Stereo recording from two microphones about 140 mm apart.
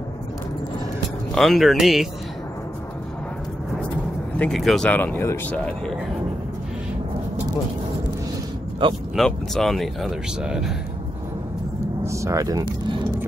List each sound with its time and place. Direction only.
1.3 s speech: centre (ahead or behind)
4.4 s speech: centre (ahead or behind)
4.9 s speech: 15° left (ahead or behind)
9.1 s speech: centre (ahead or behind)
12.1 s speech: 20° right (ahead or behind)